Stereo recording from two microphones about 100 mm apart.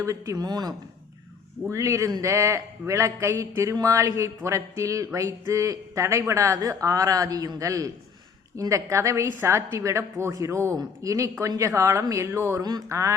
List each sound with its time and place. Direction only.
0.0 s a man's voice: 35° right (ahead or behind)
12.6 s speech: 45° right (ahead or behind)